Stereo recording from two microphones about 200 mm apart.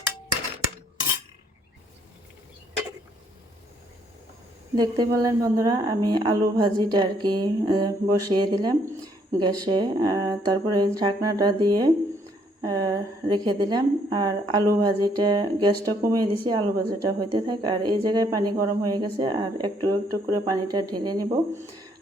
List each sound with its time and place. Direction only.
4.7 s a woman's voice: 20° right (ahead or behind)